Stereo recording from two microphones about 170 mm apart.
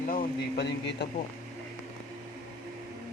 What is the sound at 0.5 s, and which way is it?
Speech, 85° left.